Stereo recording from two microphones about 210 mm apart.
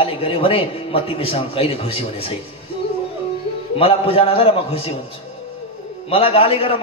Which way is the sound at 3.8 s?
25° left (ahead or behind).